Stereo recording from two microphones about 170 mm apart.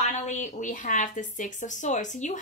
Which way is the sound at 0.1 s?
45° left (ahead or behind).